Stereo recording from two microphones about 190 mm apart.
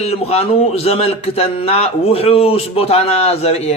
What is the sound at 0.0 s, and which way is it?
Speech, 35° left (ahead or behind).